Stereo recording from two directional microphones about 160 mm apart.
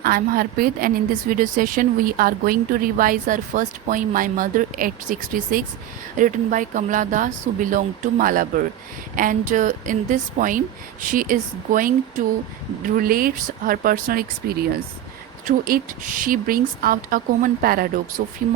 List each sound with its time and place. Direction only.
0.0 s a woman's voice: 65° right (ahead or behind)